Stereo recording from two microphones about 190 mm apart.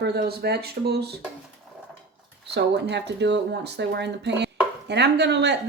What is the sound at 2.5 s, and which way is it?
Speech, 65° right (ahead or behind).